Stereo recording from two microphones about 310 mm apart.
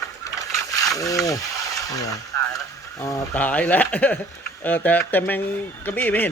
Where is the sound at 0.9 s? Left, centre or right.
Centre.